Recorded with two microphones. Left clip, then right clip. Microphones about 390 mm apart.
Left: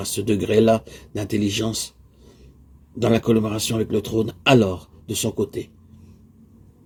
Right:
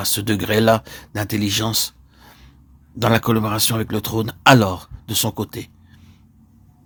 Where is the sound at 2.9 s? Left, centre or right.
Right.